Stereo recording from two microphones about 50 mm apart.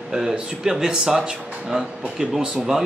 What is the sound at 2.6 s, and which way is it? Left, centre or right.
Speech, centre.